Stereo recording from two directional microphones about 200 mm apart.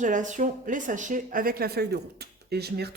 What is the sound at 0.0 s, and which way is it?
A woman's voice, 40° right (ahead or behind).